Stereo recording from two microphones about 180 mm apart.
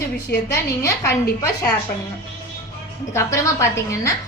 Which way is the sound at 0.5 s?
15° left (ahead or behind).